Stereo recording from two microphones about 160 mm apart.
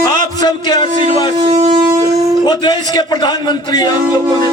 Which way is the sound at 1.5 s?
35° right (ahead or behind).